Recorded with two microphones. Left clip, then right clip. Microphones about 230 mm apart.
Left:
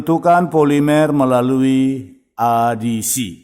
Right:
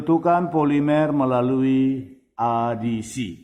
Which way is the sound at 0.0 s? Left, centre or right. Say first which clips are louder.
Left 6 dB; left.